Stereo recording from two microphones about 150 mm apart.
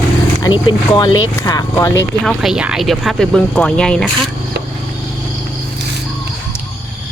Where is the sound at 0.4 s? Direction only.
30° left (ahead or behind).